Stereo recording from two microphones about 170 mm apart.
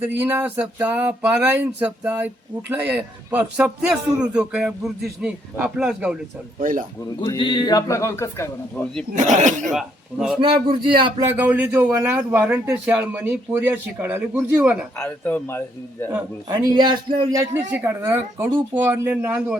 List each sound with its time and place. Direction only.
0.2 s speech: 10° right (ahead or behind)
6.6 s speech: 50° right (ahead or behind)
7.2 s speech: 30° left (ahead or behind)
9.1 s speech: 45° right (ahead or behind)
9.7 s a man's voice: centre (ahead or behind)
10.4 s speech: 30° right (ahead or behind)
11.3 s speech: 10° right (ahead or behind)
14.9 s a man's voice: 10° left (ahead or behind)
16.0 s speech: 20° right (ahead or behind)